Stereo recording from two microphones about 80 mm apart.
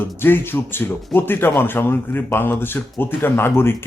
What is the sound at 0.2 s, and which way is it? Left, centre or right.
Speech, left.